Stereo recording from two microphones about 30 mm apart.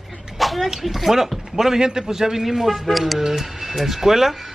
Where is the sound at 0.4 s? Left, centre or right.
Centre.